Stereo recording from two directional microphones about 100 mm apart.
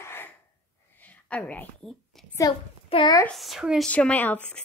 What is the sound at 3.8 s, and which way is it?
Speech, 15° left (ahead or behind).